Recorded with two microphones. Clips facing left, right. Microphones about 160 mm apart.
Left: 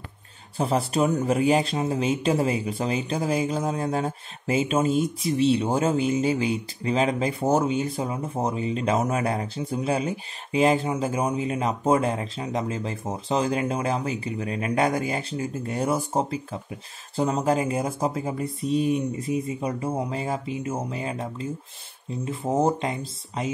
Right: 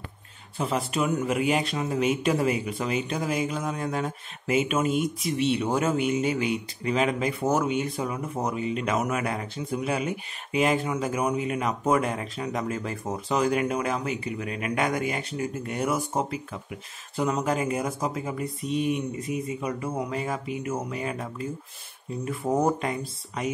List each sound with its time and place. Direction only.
0.6 s speech: 35° left (ahead or behind)